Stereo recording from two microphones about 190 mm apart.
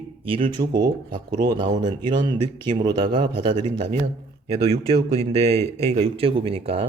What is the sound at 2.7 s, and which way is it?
Speech, 20° right (ahead or behind).